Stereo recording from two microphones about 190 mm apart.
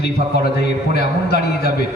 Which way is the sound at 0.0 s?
55° left (ahead or behind).